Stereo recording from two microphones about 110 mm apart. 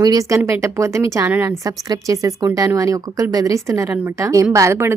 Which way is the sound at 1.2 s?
15° right (ahead or behind).